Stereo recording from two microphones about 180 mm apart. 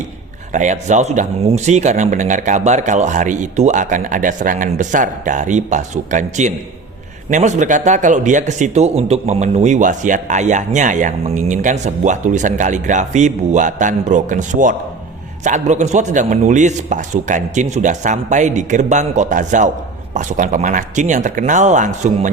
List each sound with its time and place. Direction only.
0.5 s speech: 40° right (ahead or behind)